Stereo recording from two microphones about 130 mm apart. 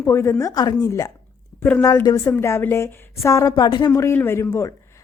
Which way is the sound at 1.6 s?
10° left (ahead or behind).